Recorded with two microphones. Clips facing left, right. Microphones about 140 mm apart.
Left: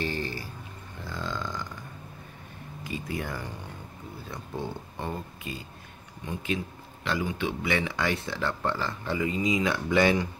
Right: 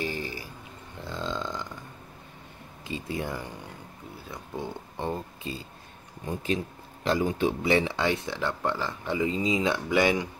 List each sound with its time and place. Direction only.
0.0 s a sound: 10° right (ahead or behind)
1.0 s burping: 20° right (ahead or behind)
2.8 s speech: 25° right (ahead or behind)
4.9 s speech: 25° right (ahead or behind)
9.8 s speech: 15° right (ahead or behind)